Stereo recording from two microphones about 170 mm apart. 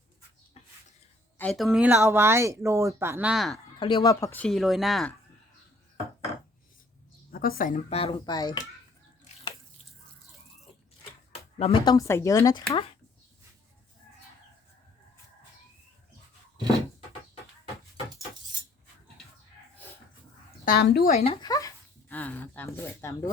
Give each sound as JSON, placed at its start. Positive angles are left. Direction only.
{"t": 1.4, "sound": "speech", "side_deg": 0}
{"t": 2.0, "sound": "speech", "side_deg": -15}
{"t": 3.8, "sound": "speech", "side_deg": 30}
{"t": 7.3, "sound": "a woman's voice", "side_deg": 60}
{"t": 7.9, "sound": "speech", "side_deg": 35}
{"t": 8.4, "sound": "speech", "side_deg": 25}
{"t": 11.6, "sound": "speech", "side_deg": 30}
{"t": 11.9, "sound": "speech", "side_deg": 15}
{"t": 20.7, "sound": "speech", "side_deg": 70}
{"t": 21.4, "sound": "speech", "side_deg": 20}
{"t": 22.1, "sound": "speech", "side_deg": 10}